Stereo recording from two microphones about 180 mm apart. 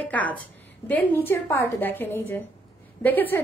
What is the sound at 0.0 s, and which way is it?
A woman's voice, 10° left (ahead or behind).